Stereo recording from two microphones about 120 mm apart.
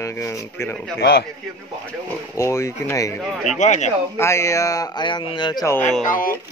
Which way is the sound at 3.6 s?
80° left.